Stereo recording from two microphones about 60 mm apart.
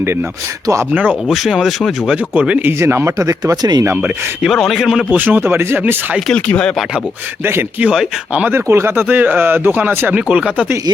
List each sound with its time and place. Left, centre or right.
1.3 s speech: centre
2.3 s speech: right
2.6 s speech: right
3.2 s speech: right
4.4 s speech: centre
5.1 s speech: right
6.3 s speech: centre
8.6 s speech: right
9.0 s speech: right
10.1 s speech: right